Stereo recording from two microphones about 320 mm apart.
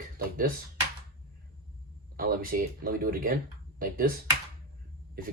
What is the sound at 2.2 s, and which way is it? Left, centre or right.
Speech, right.